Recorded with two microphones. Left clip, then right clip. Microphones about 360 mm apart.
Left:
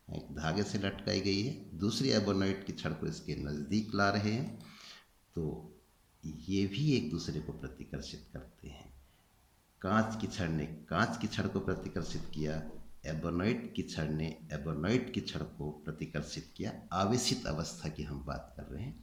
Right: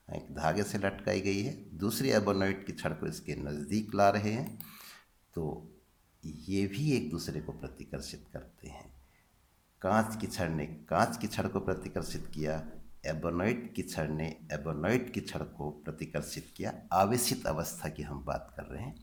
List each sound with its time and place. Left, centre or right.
0.1 s speech: centre
9.8 s speech: centre